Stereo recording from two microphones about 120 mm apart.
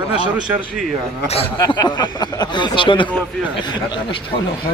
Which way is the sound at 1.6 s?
35° left (ahead or behind).